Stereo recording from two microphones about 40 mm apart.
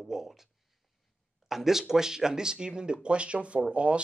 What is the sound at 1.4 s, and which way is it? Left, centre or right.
Speech, centre.